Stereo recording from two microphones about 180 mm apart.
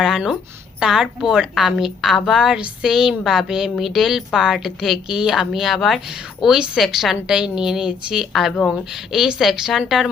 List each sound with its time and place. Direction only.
0.0 s a woman's voice: centre (ahead or behind)